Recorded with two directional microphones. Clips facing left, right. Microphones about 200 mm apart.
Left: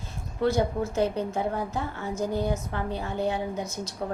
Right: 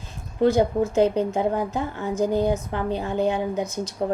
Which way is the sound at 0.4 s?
15° right (ahead or behind).